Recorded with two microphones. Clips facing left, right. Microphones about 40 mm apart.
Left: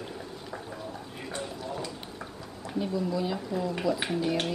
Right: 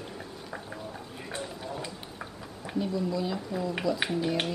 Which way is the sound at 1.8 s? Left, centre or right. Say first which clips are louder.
Left 1 dB; centre.